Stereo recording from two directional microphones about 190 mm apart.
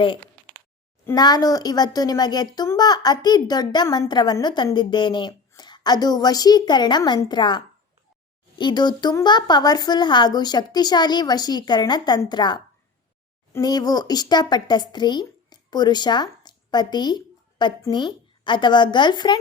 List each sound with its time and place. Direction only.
1.0 s a woman's voice: 20° left (ahead or behind)